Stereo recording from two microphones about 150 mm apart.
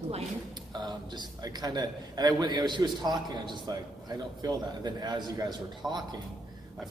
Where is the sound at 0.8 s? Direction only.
25° right (ahead or behind).